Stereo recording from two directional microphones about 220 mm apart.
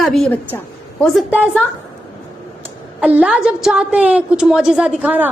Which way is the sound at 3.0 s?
5° right (ahead or behind).